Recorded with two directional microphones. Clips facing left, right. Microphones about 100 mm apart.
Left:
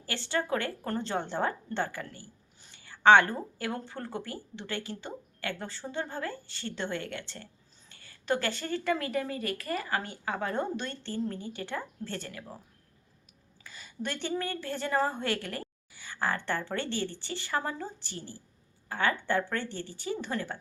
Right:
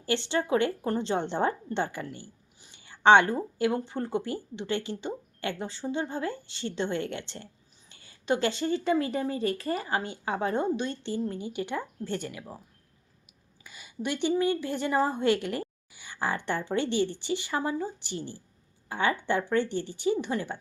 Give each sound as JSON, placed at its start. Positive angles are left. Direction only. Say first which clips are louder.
{"t": 0.0, "sound": "speech", "louder": "right 4 dB", "side_deg": -25}
{"t": 13.7, "sound": "a woman's voice", "louder": "right 4 dB", "side_deg": -15}